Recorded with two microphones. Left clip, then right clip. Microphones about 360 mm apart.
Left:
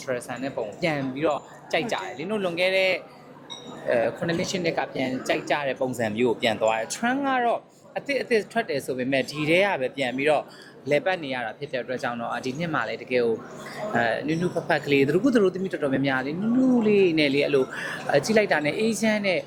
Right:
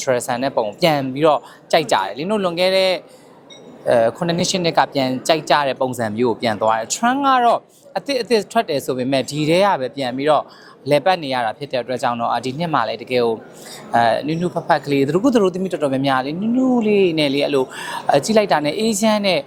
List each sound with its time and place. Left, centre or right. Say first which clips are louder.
0.0 s speech: right 11 dB; right
6.0 s speech: right 5 dB; right
6.6 s a woman's voice: right 6 dB; right